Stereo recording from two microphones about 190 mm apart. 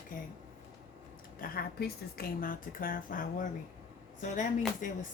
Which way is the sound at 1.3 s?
50° left (ahead or behind).